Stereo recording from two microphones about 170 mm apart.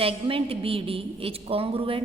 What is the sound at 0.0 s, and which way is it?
A woman's voice, 35° right (ahead or behind).